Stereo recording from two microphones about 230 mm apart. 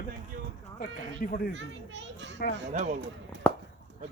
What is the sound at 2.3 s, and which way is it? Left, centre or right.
Speech, left.